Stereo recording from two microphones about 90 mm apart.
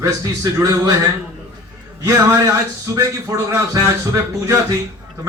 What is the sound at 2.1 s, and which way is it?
A man's voice, 35° right (ahead or behind).